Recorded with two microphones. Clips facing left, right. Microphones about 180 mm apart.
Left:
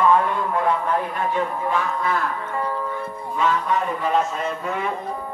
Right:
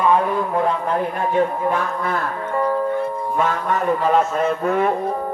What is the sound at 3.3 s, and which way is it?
A man's voice, 50° right (ahead or behind).